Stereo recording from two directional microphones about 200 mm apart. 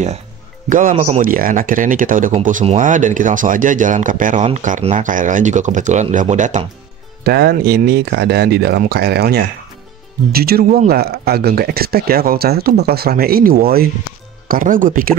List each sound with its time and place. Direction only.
0.7 s speech: 40° right (ahead or behind)
7.2 s speech: 50° right (ahead or behind)